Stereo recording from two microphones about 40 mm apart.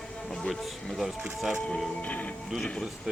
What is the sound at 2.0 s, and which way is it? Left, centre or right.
Speech, left.